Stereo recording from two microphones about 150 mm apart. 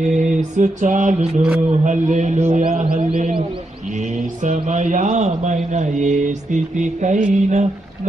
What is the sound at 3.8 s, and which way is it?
Mantra, 50° right (ahead or behind).